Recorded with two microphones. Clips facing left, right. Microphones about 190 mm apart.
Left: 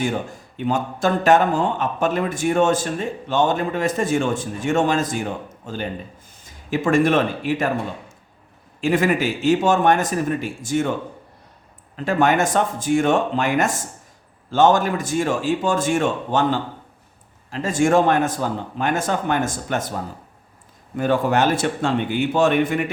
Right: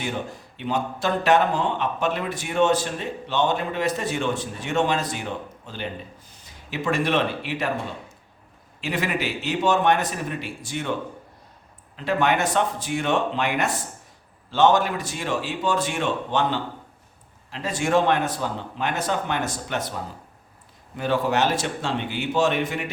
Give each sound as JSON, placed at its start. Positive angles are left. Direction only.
{"t": 0.0, "sound": "speech", "side_deg": 45}
{"t": 8.8, "sound": "speech", "side_deg": 50}
{"t": 11.9, "sound": "speech", "side_deg": 45}